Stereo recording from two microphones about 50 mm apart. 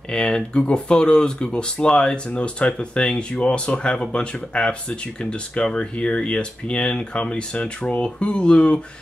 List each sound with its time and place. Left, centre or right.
0.1 s speech: centre